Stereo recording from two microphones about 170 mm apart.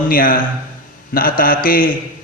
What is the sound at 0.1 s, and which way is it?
A man's voice, 55° left (ahead or behind).